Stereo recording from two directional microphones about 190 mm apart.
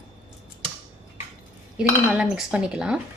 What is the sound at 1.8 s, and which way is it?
A woman's voice, 5° right (ahead or behind).